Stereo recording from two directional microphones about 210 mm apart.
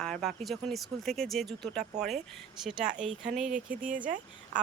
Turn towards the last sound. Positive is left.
turn(degrees=-40)  # may be behind; listen again after turning